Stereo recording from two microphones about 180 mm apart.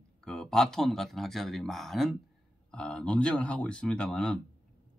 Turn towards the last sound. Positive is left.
turn(degrees=5)  # may be behind; listen again after turning